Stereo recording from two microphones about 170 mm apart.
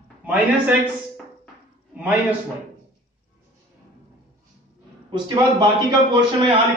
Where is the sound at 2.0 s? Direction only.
10° right (ahead or behind).